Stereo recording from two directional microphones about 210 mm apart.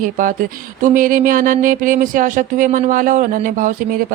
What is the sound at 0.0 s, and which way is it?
Speech, 40° right (ahead or behind).